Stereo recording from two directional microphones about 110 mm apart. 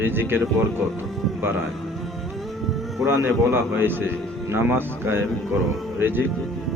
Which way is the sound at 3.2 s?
20° right (ahead or behind).